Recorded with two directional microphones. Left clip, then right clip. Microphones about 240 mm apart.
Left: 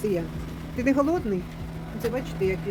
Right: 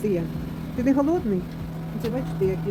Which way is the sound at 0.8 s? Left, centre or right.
Centre.